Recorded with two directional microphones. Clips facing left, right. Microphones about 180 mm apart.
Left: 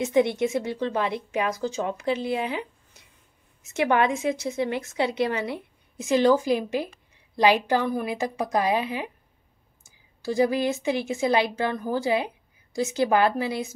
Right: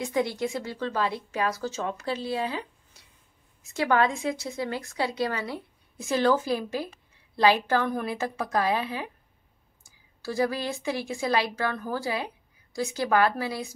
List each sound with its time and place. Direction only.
0.0 s a woman's voice: 25° left (ahead or behind)